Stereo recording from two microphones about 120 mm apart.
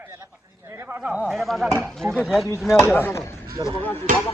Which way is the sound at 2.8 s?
20° left (ahead or behind).